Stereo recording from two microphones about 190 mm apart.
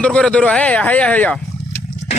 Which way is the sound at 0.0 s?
5° left (ahead or behind).